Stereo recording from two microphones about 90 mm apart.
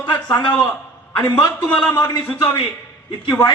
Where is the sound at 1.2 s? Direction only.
40° left (ahead or behind).